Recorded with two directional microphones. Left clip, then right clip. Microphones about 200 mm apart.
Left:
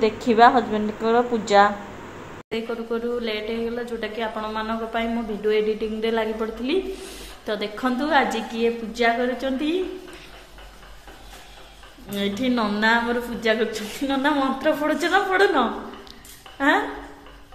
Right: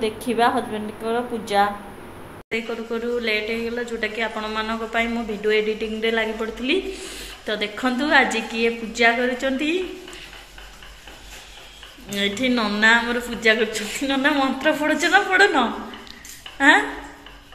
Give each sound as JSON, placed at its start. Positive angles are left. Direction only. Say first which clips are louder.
{"t": 0.0, "sound": "a woman's voice", "louder": "left 5 dB", "side_deg": 20}
{"t": 2.5, "sound": "a woman's voice", "louder": "right 1 dB", "side_deg": 5}
{"t": 12.1, "sound": "a woman's voice", "louder": "right 3 dB", "side_deg": 0}